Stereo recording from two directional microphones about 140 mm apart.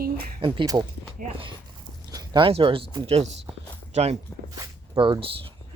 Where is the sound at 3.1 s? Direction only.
50° right (ahead or behind).